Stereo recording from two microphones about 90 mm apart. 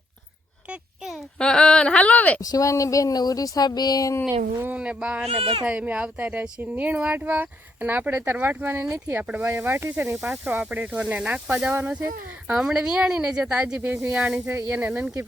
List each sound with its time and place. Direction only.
0.7 s a sound: 5° right (ahead or behind)
1.4 s speech: 10° left (ahead or behind)
2.4 s speech: 40° left (ahead or behind)
4.3 s speech: 30° right (ahead or behind)
4.7 s speech: 10° right (ahead or behind)
5.2 s speech: 90° right
5.6 s speech: 15° right (ahead or behind)
10.2 s speech: 5° right (ahead or behind)
10.5 s speech: 15° right (ahead or behind)
12.5 s speech: 5° right (ahead or behind)
14.3 s speech: 30° right (ahead or behind)
14.7 s speech: 15° right (ahead or behind)